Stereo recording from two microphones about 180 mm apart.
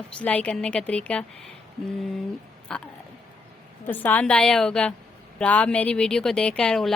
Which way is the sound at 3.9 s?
10° left (ahead or behind).